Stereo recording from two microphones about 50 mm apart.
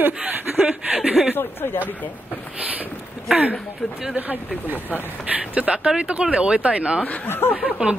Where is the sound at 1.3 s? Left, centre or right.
Left.